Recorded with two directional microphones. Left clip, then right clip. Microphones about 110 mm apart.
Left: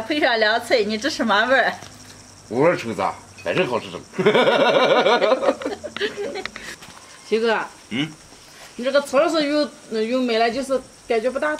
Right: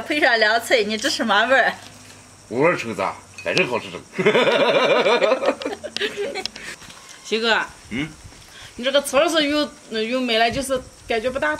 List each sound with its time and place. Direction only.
0.1 s speech: 15° right (ahead or behind)
2.5 s speech: 5° left (ahead or behind)
5.7 s speech: 15° right (ahead or behind)
7.2 s speech: 25° right (ahead or behind)
8.8 s speech: 20° right (ahead or behind)